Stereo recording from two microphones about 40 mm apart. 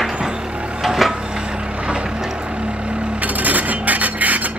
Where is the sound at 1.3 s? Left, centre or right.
Right.